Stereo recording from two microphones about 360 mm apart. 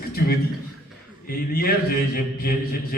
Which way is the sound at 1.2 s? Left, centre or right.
Left.